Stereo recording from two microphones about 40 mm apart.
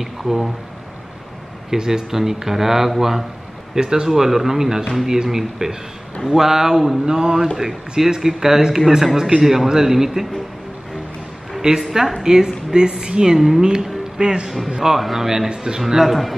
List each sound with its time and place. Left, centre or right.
0.0 s speech: centre
1.7 s a man's voice: centre
4.1 s a man's voice: centre
11.6 s a man's voice: centre
16.0 s a man's voice: centre